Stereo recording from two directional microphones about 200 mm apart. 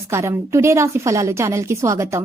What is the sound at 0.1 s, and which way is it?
A woman's voice, 15° right (ahead or behind).